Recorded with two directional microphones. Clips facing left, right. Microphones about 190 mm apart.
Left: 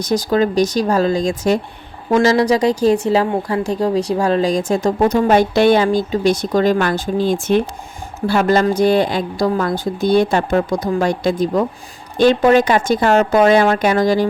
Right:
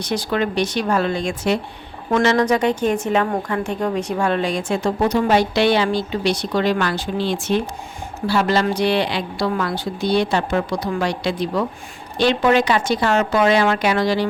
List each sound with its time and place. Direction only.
0.0 s a woman's voice: 40° left (ahead or behind)